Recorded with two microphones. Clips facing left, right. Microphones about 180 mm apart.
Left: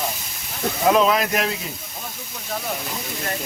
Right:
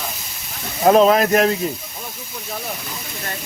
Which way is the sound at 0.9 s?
40° right (ahead or behind).